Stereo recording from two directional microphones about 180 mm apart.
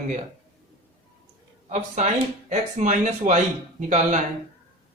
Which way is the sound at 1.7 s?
40° right (ahead or behind).